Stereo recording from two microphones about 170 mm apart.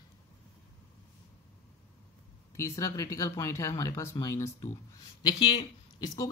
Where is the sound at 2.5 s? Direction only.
15° left (ahead or behind).